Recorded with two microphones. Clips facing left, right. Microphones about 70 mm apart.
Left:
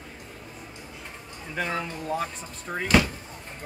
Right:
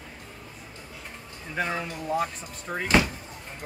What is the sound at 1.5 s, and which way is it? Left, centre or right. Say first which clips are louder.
Speech: even; centre.